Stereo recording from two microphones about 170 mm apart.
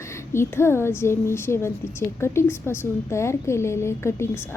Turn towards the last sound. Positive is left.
turn(degrees=15)  # may be behind; listen again after turning